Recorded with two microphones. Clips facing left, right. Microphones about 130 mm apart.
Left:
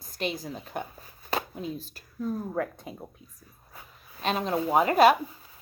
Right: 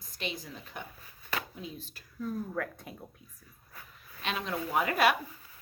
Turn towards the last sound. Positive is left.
turn(degrees=30)  # may be behind; listen again after turning